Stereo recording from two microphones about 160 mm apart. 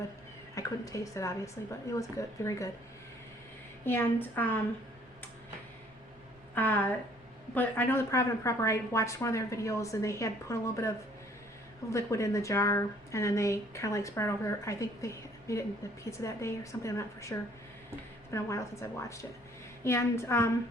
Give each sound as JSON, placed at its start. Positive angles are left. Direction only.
{"t": 0.5, "sound": "a woman's voice", "side_deg": 20}
{"t": 3.8, "sound": "a woman's voice", "side_deg": 15}
{"t": 6.5, "sound": "a woman's voice", "side_deg": 10}